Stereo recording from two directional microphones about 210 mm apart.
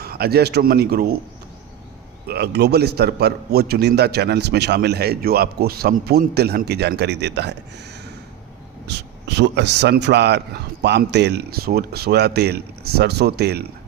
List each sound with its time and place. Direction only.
0.0 s a man's voice: 45° right (ahead or behind)
2.2 s a man's voice: 50° right (ahead or behind)
8.9 s a man's voice: 55° right (ahead or behind)